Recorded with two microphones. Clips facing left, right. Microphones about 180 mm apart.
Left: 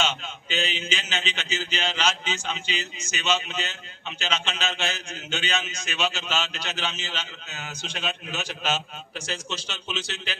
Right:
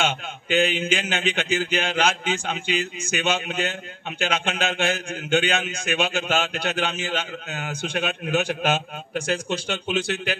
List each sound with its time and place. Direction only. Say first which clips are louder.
0.0 s a man's voice: right 3 dB; 55° right (ahead or behind)